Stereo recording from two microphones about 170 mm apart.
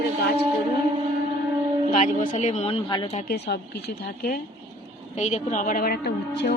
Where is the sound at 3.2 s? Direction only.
70° left (ahead or behind).